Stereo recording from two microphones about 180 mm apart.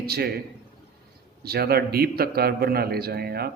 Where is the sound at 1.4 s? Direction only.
60° right (ahead or behind).